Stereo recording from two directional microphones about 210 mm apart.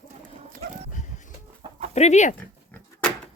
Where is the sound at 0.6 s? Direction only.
30° right (ahead or behind).